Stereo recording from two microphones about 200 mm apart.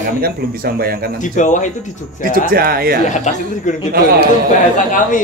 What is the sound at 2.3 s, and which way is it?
Speech, 50° right (ahead or behind).